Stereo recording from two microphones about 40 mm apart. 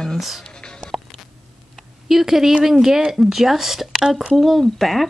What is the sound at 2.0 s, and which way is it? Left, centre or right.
Speech, centre.